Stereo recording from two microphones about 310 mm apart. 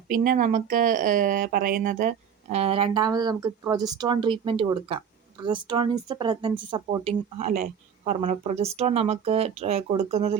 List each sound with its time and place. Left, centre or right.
0.1 s speech: right